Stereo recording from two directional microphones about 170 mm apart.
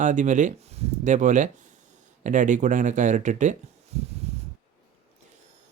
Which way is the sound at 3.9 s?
40° right (ahead or behind).